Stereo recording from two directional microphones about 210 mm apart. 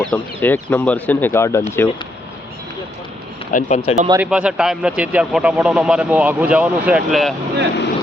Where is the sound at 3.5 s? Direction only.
35° left (ahead or behind).